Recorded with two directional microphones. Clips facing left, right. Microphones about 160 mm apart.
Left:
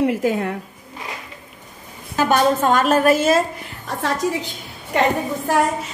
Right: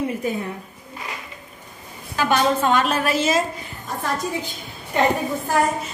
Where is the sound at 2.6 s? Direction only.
45° left (ahead or behind).